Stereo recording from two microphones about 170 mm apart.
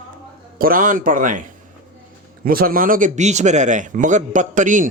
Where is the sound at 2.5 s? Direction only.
55° right (ahead or behind).